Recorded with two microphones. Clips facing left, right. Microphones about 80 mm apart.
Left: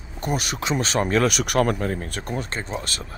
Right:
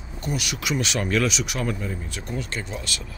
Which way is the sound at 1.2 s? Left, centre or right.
Left.